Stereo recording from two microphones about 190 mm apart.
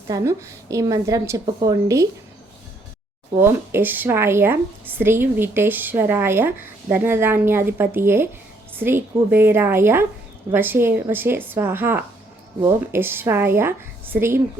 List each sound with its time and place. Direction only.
0.1 s speech: 15° right (ahead or behind)
3.3 s speech: 15° right (ahead or behind)